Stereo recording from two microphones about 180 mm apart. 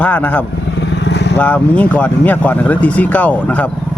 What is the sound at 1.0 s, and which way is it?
Vehicle, 70° left (ahead or behind).